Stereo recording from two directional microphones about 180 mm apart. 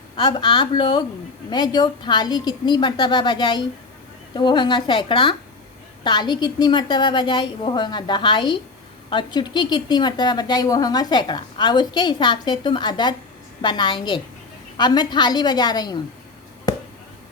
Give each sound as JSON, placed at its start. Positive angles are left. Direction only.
{"t": 0.2, "sound": "a woman's voice", "side_deg": 25}